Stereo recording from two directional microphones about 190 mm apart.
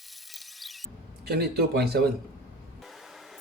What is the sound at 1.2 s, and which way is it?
Speech, 55° right (ahead or behind).